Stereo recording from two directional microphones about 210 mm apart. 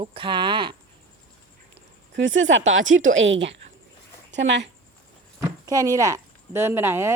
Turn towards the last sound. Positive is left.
turn(degrees=-10)  # may be behind; listen again after turning